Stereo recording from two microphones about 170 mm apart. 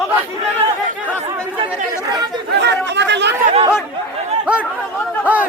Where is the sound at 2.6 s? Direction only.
90° right.